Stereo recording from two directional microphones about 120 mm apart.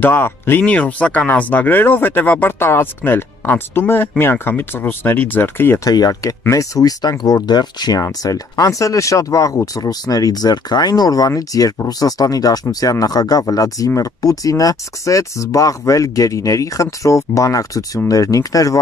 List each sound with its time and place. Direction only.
0.0 s speech: 15° left (ahead or behind)
5.9 s speech: 30° left (ahead or behind)